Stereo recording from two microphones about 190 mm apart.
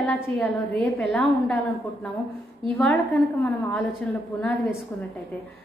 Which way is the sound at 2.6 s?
5° left (ahead or behind).